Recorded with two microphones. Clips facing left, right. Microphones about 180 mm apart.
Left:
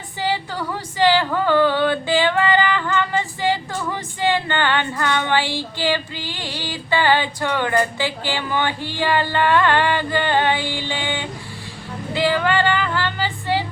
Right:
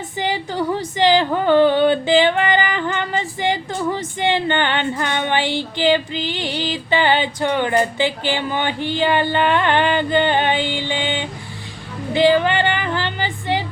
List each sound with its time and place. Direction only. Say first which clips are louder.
0.2 s female singing: right 2 dB; 20° right (ahead or behind)